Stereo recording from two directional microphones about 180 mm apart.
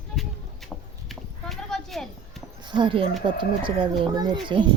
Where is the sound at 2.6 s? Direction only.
25° right (ahead or behind).